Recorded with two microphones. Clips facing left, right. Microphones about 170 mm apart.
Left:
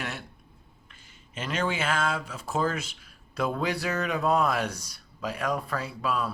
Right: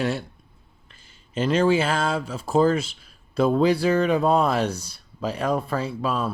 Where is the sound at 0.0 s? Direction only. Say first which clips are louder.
Right 11 dB; 30° right (ahead or behind).